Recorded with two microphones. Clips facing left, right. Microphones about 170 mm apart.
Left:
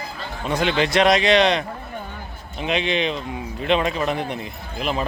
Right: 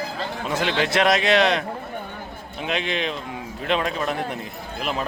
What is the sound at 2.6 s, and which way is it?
A man's voice, centre (ahead or behind).